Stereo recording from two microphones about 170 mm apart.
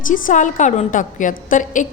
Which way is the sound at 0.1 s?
50° left (ahead or behind).